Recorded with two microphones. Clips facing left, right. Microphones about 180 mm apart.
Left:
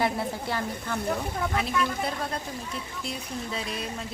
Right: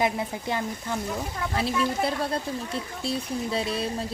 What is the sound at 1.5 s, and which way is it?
Speech, 30° right (ahead or behind).